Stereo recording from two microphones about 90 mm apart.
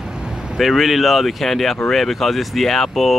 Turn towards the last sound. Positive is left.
turn(degrees=0)  # may be behind; listen again after turning